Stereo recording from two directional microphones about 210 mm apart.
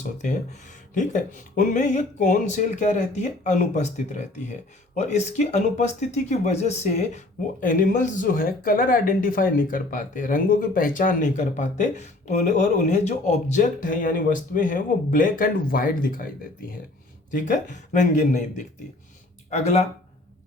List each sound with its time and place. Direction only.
0.2 s speech: 35° left (ahead or behind)
17.3 s speech: 35° left (ahead or behind)